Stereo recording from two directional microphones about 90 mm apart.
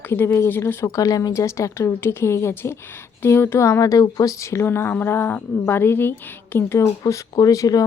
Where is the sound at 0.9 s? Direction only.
45° left (ahead or behind).